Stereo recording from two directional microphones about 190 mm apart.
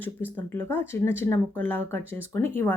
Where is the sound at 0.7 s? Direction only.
10° left (ahead or behind).